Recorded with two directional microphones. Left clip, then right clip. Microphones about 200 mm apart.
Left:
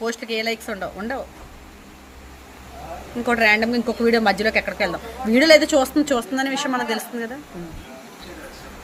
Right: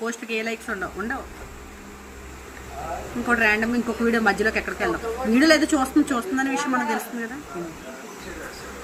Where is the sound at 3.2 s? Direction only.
60° left (ahead or behind).